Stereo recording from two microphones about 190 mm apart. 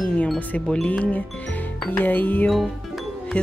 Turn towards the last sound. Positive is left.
turn(degrees=5)  # may be behind; listen again after turning